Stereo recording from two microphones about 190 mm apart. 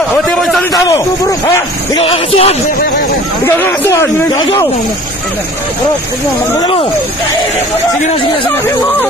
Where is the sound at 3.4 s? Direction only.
10° left (ahead or behind).